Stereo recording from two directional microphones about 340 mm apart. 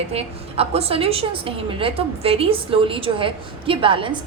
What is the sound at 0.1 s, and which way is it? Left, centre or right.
A woman's voice, centre.